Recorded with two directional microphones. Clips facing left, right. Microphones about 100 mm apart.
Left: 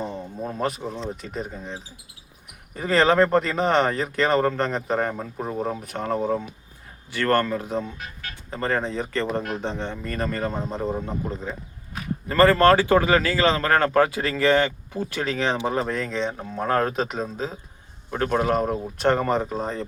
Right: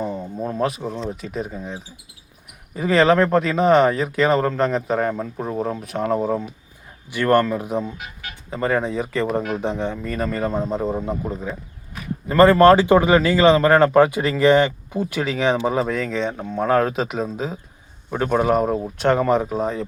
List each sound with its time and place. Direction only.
0.0 s speech: 5° right (ahead or behind)
12.4 s speech: 20° right (ahead or behind)